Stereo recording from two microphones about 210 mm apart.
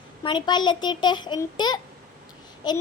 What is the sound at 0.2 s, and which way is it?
A child's voice, 20° left (ahead or behind).